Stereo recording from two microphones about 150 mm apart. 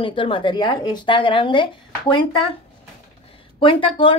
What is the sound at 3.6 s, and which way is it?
Speech, 35° left (ahead or behind).